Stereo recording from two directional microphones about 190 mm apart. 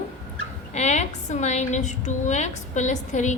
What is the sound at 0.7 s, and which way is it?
A woman's voice, 35° left (ahead or behind).